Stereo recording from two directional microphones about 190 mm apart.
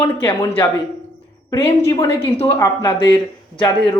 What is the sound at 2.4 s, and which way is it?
Speech, 15° left (ahead or behind).